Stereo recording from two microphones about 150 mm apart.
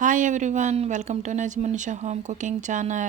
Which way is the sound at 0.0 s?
60° right (ahead or behind).